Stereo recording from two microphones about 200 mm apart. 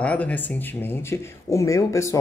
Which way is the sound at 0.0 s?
5° left (ahead or behind).